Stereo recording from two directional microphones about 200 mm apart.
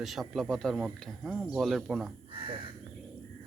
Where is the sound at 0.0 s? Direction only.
Centre (ahead or behind).